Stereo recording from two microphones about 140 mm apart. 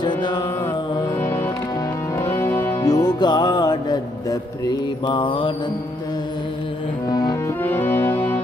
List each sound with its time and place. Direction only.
0.0 s music: 30° left (ahead or behind)
2.1 s music: 20° left (ahead or behind); by 5.5 s 35° left (ahead or behind)
7.1 s music: 30° left (ahead or behind)
7.6 s music: 15° left (ahead or behind)